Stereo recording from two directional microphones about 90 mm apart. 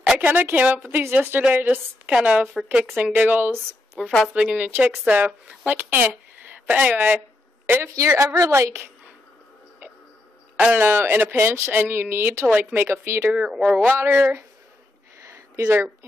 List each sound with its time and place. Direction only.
0.0 s a woman's voice: 15° right (ahead or behind)
3.9 s a woman's voice: 5° left (ahead or behind)
4.3 s a woman's voice: 10° right (ahead or behind); by 9.1 s 30° right (ahead or behind)
10.6 s speech: 20° right (ahead or behind)
13.3 s a woman's voice: 5° right (ahead or behind)
13.9 s speech: 20° right (ahead or behind)
15.2 s a sound: 35° right (ahead or behind)